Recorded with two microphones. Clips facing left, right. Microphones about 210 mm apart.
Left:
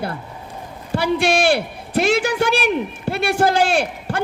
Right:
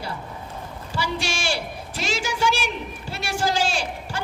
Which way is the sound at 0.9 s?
60° left (ahead or behind).